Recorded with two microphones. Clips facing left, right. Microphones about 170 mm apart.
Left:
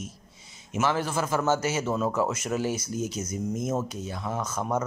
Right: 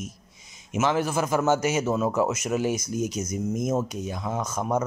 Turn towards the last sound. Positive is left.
turn(degrees=-15)  # may be behind; listen again after turning